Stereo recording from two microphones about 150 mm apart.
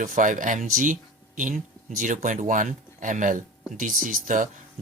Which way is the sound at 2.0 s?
60° right (ahead or behind).